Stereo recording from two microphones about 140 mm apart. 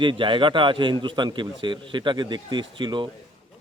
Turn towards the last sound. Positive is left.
turn(degrees=-35)  # may be behind; listen again after turning